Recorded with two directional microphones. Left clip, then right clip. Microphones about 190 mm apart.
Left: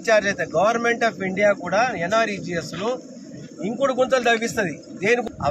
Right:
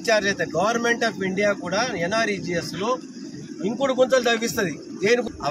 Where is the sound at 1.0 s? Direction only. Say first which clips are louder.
Left 3 dB; 5° left (ahead or behind).